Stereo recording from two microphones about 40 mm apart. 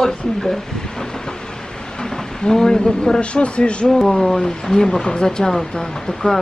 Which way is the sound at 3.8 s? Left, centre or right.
Centre.